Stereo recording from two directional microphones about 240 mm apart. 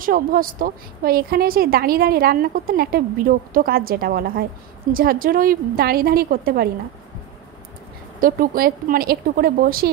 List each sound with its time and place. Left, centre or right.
0.0 s a woman's voice: right
8.2 s a woman's voice: right